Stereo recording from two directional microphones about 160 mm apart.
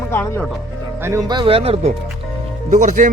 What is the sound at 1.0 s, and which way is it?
Speech, 20° right (ahead or behind).